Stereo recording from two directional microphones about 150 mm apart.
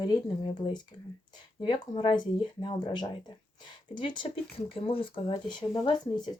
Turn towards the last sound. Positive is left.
turn(degrees=30)  # may be behind; listen again after turning